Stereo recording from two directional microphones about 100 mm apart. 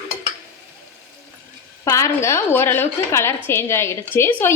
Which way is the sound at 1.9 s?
30° left (ahead or behind).